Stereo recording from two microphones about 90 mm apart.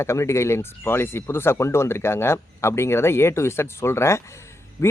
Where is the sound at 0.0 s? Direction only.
30° left (ahead or behind).